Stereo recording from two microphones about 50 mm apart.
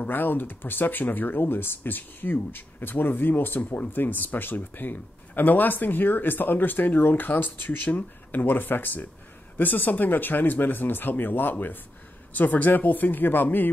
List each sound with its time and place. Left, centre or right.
0.0 s speech: left